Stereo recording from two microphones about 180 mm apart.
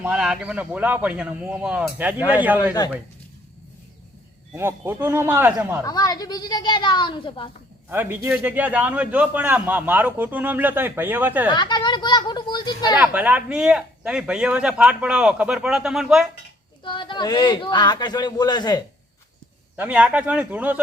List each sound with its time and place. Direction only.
0.0 s a man's voice: 5° right (ahead or behind)
4.5 s a man's voice: 15° right (ahead or behind)
5.8 s speech: 20° left (ahead or behind)
7.9 s a man's voice: 10° right (ahead or behind)
11.4 s speech: 25° left (ahead or behind)
13.0 s speech: 5° right (ahead or behind)
16.8 s speech: 25° left (ahead or behind)
19.7 s a man's voice: 10° right (ahead or behind)